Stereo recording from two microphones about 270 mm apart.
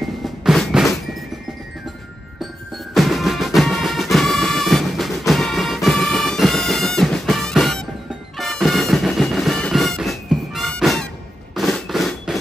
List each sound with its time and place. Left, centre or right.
0.0 s drum: centre
2.9 s music: centre
11.5 s a sound: centre